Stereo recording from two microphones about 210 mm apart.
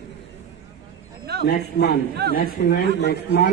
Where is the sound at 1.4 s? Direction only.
50° left (ahead or behind).